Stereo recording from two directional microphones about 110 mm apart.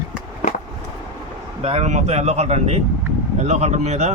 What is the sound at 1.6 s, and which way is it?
Speech, 80° right.